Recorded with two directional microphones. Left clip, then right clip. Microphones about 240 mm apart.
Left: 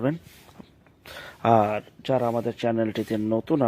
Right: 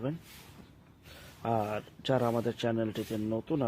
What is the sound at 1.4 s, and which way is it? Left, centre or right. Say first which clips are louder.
Speech: left 12 dB; left.